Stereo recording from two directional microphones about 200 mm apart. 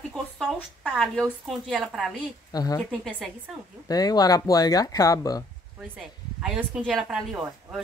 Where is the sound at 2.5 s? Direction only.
20° left (ahead or behind).